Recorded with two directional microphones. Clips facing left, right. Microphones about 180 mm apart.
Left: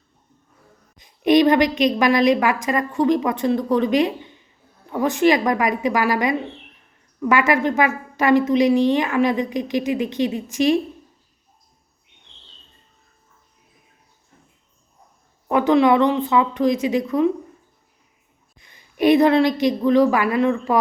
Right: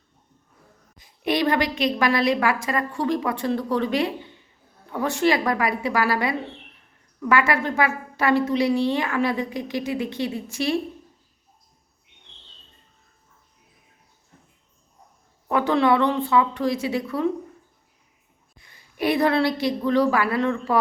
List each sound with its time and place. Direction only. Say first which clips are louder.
0.9 s a woman's voice: left 8 dB; 20° left (ahead or behind)
15.4 s a woman's voice: left 4 dB; 15° left (ahead or behind)
18.6 s a woman's voice: left 7 dB; 20° left (ahead or behind)